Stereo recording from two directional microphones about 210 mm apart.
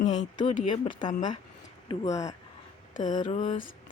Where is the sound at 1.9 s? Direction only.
15° left (ahead or behind).